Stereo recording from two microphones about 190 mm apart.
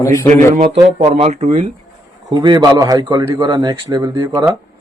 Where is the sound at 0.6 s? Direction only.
30° right (ahead or behind).